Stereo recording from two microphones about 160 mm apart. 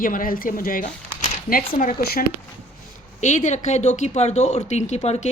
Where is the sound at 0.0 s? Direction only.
60° left (ahead or behind).